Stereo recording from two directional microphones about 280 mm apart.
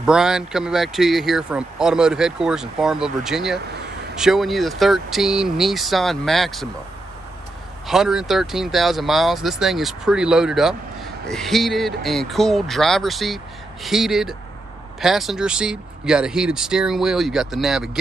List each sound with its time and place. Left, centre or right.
0.0 s speech: centre
7.8 s speech: centre